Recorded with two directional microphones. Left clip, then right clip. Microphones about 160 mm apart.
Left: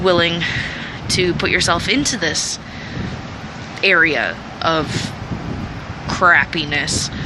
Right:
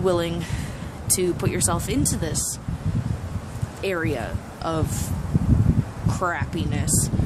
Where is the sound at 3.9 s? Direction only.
10° right (ahead or behind).